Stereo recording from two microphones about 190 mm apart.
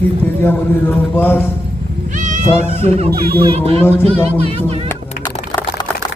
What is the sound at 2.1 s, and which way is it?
Cat, 40° right (ahead or behind).